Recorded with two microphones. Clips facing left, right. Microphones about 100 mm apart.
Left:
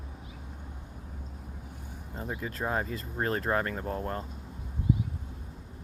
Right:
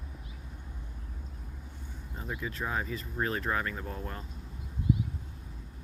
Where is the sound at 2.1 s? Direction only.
35° left (ahead or behind).